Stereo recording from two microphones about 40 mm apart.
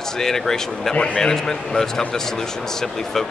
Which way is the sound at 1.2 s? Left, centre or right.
Centre.